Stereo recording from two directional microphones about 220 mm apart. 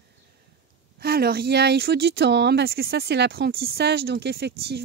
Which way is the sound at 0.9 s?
45° right (ahead or behind).